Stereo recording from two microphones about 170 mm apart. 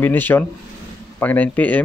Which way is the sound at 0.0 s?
10° left (ahead or behind).